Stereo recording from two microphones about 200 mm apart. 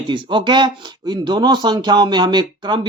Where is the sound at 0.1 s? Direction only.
25° right (ahead or behind).